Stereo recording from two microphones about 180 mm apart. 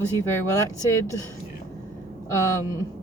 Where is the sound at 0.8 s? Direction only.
15° left (ahead or behind).